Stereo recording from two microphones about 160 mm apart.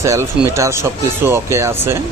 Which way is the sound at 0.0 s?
20° right (ahead or behind).